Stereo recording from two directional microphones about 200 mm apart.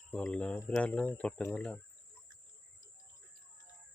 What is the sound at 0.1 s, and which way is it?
Speech, 5° left (ahead or behind).